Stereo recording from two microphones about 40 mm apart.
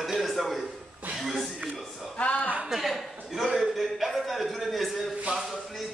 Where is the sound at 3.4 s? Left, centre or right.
Centre.